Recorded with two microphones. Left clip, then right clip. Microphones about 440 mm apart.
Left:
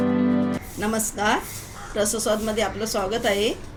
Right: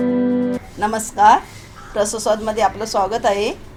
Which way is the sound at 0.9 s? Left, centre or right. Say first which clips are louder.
Right 11 dB; centre.